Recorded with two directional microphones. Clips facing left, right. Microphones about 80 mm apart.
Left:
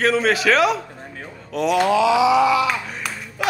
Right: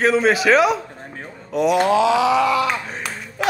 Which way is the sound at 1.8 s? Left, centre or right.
Right.